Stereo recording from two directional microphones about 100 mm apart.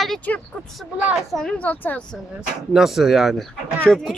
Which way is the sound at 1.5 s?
15° left (ahead or behind).